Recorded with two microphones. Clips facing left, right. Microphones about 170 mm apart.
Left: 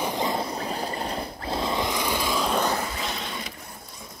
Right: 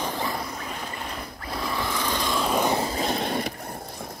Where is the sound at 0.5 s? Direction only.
35° left (ahead or behind); by 2.6 s centre (ahead or behind).